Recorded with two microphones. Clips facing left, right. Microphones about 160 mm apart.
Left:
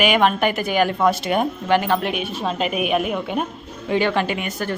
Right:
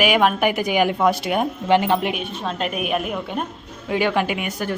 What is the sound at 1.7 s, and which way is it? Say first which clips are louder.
Speech: right 2 dB; 20° right (ahead or behind).